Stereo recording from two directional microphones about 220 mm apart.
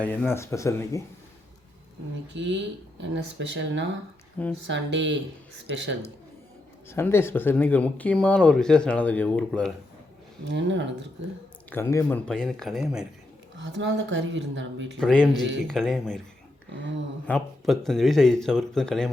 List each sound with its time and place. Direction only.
0.0 s speech: 5° left (ahead or behind)
2.3 s speech: 55° right (ahead or behind)
6.9 s speech: 10° left (ahead or behind)
10.5 s speech: 55° right (ahead or behind)
11.7 s speech: 10° left (ahead or behind)
13.6 s speech: 55° right (ahead or behind)
14.9 s speech: 5° left (ahead or behind)
17.2 s speech: 5° left (ahead or behind)